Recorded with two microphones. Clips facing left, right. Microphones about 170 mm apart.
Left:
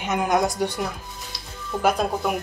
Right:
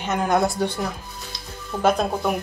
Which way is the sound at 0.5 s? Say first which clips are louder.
Right 1 dB; 15° left (ahead or behind).